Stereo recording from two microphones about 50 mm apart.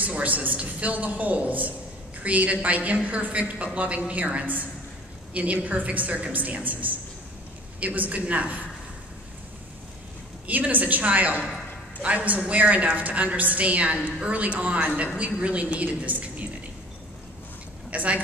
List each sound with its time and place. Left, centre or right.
0.0 s a woman's voice: right
10.4 s a woman's voice: right
17.8 s a woman's voice: right